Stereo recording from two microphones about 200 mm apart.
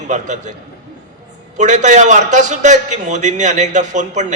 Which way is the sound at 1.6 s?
35° right (ahead or behind).